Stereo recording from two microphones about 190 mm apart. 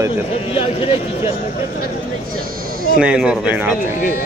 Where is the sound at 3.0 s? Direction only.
5° right (ahead or behind).